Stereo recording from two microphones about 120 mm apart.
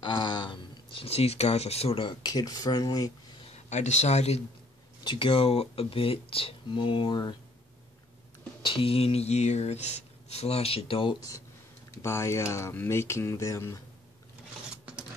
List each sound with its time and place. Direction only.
0.0 s a sound: 40° left (ahead or behind)
2.2 s speech: 35° left (ahead or behind)
3.5 s speech: 75° left (ahead or behind)
5.0 s speech: 45° left (ahead or behind)
8.6 s speech: 50° left (ahead or behind)
12.0 s speech: 25° left (ahead or behind)